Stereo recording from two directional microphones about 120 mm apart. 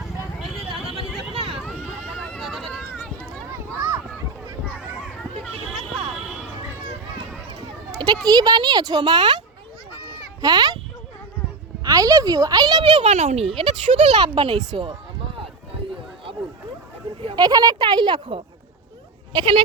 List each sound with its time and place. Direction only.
1.3 s a sound: 50° right (ahead or behind)
1.8 s a sound: centre (ahead or behind)
3.5 s children playing: 30° right (ahead or behind)
8.0 s speech: 35° right (ahead or behind)
10.4 s speech: 35° right (ahead or behind)
11.8 s speech: 30° right (ahead or behind)
13.1 s speech: 60° right (ahead or behind)
17.2 s a sound: 50° right (ahead or behind)
17.4 s speech: 35° right (ahead or behind)